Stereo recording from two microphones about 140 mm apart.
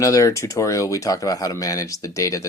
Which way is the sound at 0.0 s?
25° left (ahead or behind).